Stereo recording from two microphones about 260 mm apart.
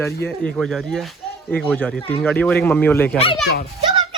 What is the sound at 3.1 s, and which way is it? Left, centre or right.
Speech, left.